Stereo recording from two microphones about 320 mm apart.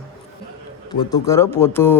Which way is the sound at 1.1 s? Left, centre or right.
Centre.